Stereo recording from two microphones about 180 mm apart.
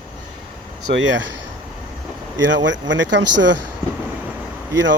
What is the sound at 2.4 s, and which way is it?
Speech, 90° right.